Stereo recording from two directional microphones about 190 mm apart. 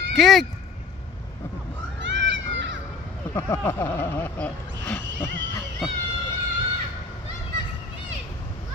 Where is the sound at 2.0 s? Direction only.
70° right (ahead or behind).